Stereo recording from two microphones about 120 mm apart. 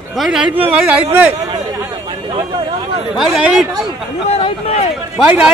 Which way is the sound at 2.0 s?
40° right (ahead or behind).